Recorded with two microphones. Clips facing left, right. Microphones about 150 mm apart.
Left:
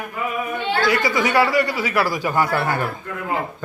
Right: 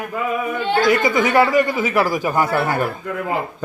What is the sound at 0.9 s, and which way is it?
Speech, 20° right (ahead or behind).